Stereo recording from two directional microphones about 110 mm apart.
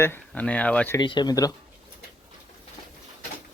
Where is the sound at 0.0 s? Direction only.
15° left (ahead or behind).